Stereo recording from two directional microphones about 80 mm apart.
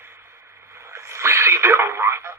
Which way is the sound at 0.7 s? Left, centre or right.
Right.